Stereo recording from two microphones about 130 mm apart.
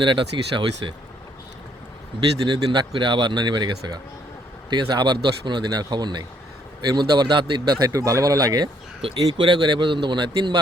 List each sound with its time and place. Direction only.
0.0 s speech: 40° right (ahead or behind)
2.5 s speech: 35° right (ahead or behind)